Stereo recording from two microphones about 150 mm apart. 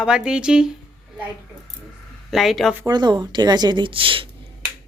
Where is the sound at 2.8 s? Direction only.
30° right (ahead or behind).